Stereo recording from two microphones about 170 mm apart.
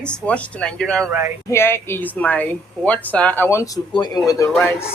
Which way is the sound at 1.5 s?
15° left (ahead or behind).